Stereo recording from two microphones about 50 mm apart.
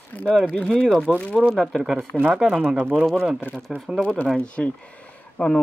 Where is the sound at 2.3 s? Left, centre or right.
Centre.